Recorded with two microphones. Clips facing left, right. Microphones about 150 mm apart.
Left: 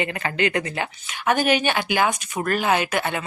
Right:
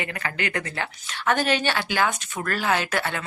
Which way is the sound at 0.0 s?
25° left (ahead or behind).